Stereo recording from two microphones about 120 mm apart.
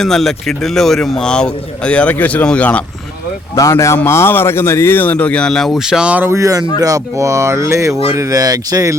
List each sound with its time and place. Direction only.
0.0 s a man's voice: 5° left (ahead or behind)
3.5 s a man's voice: 25° left (ahead or behind); by 9.0 s 30° right (ahead or behind)